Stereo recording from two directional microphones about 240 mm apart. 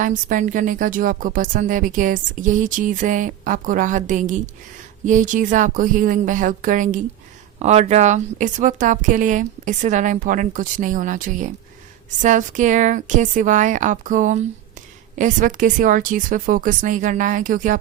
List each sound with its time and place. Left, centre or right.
0.0 s a woman's voice: right